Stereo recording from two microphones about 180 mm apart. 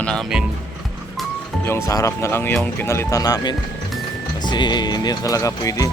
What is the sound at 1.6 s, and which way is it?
Speech, 15° left (ahead or behind).